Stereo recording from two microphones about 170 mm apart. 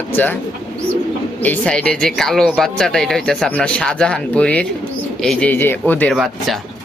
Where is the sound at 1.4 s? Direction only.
10° left (ahead or behind).